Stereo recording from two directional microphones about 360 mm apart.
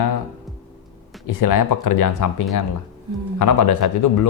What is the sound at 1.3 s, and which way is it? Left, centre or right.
Speech, left.